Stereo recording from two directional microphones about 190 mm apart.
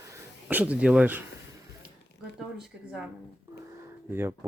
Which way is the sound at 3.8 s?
10° right (ahead or behind).